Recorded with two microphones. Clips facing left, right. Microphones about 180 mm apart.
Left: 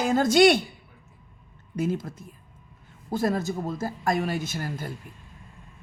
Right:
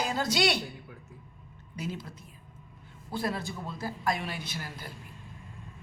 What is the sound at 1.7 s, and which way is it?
A woman's voice, 50° left (ahead or behind).